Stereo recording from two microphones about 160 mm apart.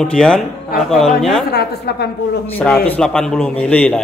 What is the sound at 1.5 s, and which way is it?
Speech, 90° left.